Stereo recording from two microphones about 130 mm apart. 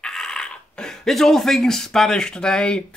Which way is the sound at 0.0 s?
5° left (ahead or behind).